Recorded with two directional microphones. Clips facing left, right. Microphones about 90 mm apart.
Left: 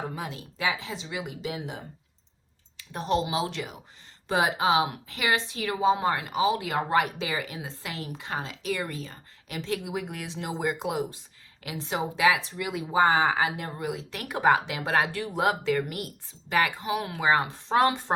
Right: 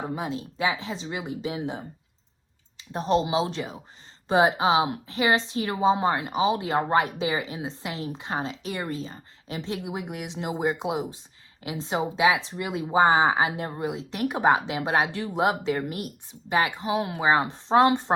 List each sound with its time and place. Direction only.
0.0 s a woman's voice: 25° right (ahead or behind)